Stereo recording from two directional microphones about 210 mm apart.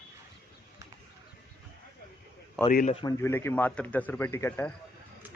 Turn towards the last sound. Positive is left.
turn(degrees=10)  # may be behind; listen again after turning